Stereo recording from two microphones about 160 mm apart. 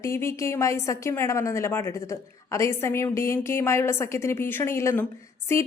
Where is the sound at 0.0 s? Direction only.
15° left (ahead or behind).